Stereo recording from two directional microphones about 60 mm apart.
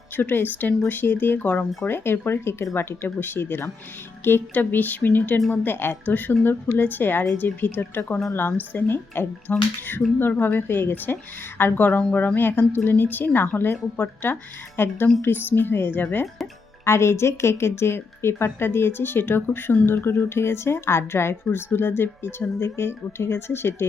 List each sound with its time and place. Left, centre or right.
0.2 s a woman's voice: left
1.9 s a woman's voice: left
16.8 s a woman's voice: left